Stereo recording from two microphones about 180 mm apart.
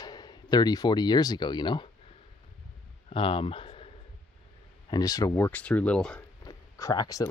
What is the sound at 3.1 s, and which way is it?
Speech, 30° left (ahead or behind).